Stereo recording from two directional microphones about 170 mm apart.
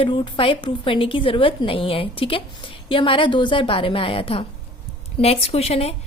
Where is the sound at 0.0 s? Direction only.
30° left (ahead or behind).